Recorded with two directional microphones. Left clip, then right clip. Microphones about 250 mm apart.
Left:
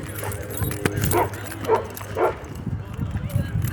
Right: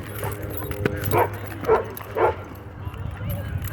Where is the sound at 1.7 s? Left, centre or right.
Right.